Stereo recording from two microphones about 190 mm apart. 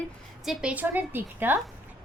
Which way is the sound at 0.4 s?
5° right (ahead or behind).